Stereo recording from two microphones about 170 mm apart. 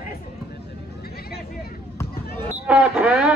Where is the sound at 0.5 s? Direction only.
65° left (ahead or behind).